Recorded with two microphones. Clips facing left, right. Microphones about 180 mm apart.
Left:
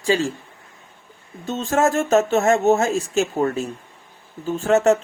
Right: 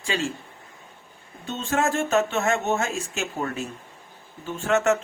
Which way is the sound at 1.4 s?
40° left (ahead or behind).